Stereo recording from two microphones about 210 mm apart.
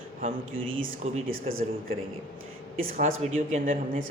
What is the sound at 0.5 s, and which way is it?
Speech, 65° right (ahead or behind).